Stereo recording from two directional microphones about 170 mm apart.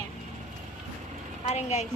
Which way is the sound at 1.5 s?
40° left (ahead or behind).